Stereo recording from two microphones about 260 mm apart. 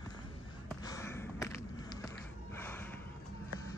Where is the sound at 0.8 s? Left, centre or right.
Centre.